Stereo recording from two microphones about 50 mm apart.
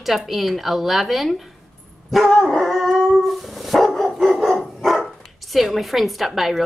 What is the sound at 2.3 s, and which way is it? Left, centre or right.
Dog, centre.